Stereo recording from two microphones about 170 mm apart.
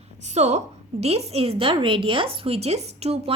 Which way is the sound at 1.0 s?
35° right (ahead or behind).